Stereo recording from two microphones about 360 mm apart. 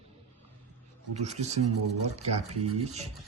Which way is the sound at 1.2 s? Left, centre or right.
Centre.